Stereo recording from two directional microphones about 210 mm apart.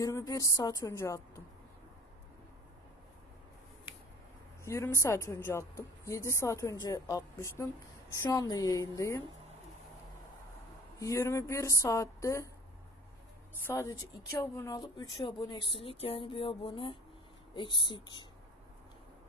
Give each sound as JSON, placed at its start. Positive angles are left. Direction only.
{"t": 0.0, "sound": "a woman's voice", "side_deg": 15}
{"t": 4.6, "sound": "a woman's voice", "side_deg": 15}
{"t": 11.0, "sound": "a woman's voice", "side_deg": 15}
{"t": 13.7, "sound": "a woman's voice", "side_deg": 15}